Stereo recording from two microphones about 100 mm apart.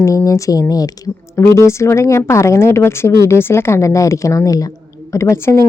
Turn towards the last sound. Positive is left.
turn(degrees=30)  # may be behind; listen again after turning